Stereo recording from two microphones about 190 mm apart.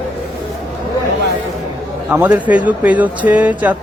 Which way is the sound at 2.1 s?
5° right (ahead or behind).